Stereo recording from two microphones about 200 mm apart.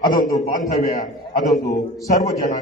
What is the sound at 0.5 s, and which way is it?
A man's voice, 40° left (ahead or behind).